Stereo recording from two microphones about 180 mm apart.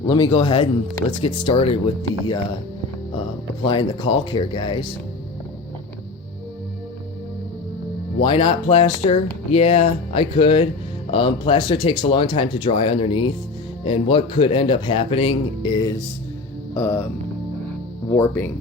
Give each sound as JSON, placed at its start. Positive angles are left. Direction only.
{"t": 0.0, "sound": "speech", "side_deg": 25}
{"t": 3.6, "sound": "speech", "side_deg": 25}
{"t": 8.2, "sound": "speech", "side_deg": 25}
{"t": 16.7, "sound": "speech", "side_deg": 15}
{"t": 18.1, "sound": "speech", "side_deg": 10}